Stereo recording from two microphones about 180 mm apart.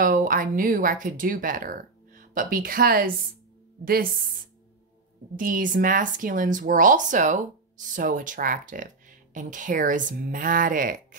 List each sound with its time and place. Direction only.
0.0 s a woman's voice: 50° right (ahead or behind)
5.3 s speech: 50° right (ahead or behind)